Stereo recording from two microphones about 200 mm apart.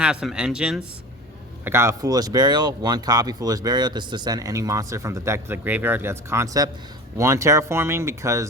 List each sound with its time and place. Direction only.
0.0 s speech: 5° right (ahead or behind)